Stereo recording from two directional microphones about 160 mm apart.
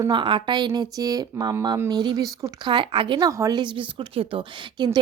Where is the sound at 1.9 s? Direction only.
25° right (ahead or behind).